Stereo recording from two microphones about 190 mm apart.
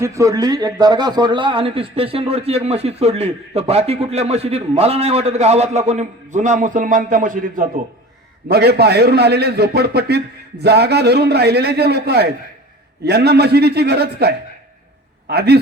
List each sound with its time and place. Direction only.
0.0 s a man's voice: 15° right (ahead or behind); by 7.6 s 45° right (ahead or behind)
8.4 s a man's voice: 60° right (ahead or behind)